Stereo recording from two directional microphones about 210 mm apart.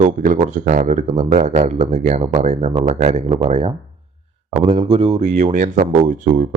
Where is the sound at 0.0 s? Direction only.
35° right (ahead or behind).